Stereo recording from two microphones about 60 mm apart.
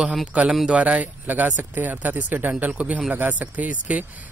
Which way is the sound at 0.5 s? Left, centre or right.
Centre.